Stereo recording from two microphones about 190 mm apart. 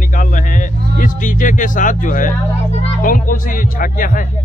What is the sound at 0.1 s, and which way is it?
Vehicle, 45° left (ahead or behind).